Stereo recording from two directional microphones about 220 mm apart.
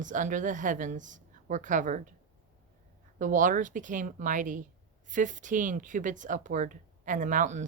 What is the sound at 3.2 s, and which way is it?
Speech, 35° right (ahead or behind).